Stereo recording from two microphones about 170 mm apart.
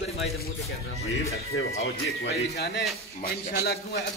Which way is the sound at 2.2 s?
80° left.